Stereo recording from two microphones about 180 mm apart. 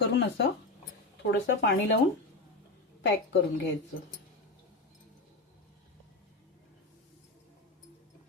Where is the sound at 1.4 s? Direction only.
70° left (ahead or behind).